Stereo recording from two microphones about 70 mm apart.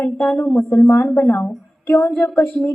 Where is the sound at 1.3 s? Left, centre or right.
Left.